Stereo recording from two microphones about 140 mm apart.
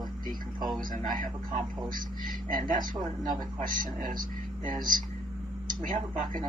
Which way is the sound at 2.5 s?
75° right (ahead or behind).